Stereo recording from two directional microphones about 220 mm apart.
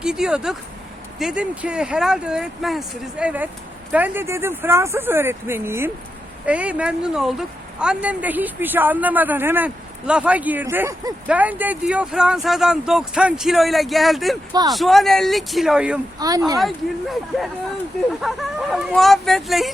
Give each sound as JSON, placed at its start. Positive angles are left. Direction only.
{"t": 0.0, "sound": "speech", "side_deg": -5}
{"t": 16.2, "sound": "speech", "side_deg": -15}
{"t": 16.6, "sound": "speech", "side_deg": 0}